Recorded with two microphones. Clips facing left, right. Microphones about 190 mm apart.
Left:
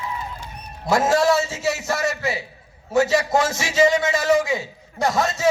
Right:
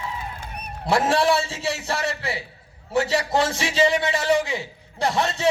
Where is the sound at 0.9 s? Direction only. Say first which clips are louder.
Left 2 dB; 30° right (ahead or behind).